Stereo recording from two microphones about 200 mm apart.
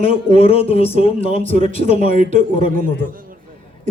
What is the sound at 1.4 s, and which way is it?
Speech, 40° right (ahead or behind).